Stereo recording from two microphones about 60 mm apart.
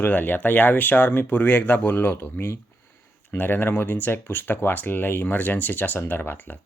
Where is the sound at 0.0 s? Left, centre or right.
Left.